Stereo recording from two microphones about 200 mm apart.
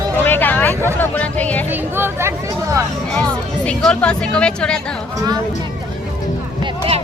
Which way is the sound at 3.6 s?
5° left (ahead or behind).